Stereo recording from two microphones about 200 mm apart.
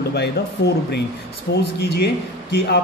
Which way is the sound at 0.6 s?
55° left (ahead or behind).